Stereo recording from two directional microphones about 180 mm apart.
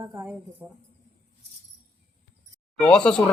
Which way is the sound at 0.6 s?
10° right (ahead or behind).